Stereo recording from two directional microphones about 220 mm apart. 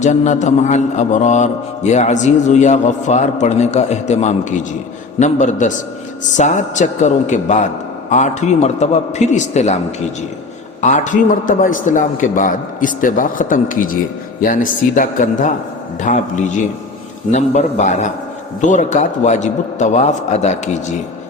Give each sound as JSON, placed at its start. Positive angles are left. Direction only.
{"t": 0.0, "sound": "a man's voice", "side_deg": 35}
{"t": 10.8, "sound": "a man's voice", "side_deg": 35}